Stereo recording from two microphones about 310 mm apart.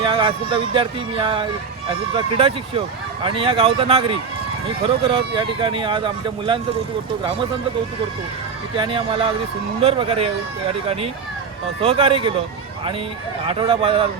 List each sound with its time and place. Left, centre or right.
0.0 s speech: centre
8.7 s speech: centre
11.8 s speech: centre
13.5 s speech: centre